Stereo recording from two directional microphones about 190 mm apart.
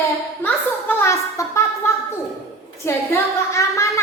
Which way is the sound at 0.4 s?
10° left (ahead or behind).